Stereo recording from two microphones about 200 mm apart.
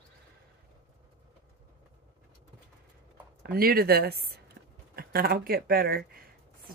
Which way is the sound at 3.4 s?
45° right (ahead or behind).